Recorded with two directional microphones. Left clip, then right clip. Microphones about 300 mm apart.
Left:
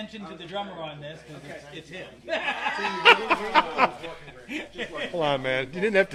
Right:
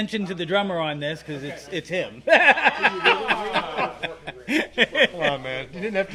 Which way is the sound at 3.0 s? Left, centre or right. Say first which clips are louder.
Left 2 dB; left.